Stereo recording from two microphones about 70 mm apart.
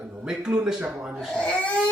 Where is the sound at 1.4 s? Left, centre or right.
Centre.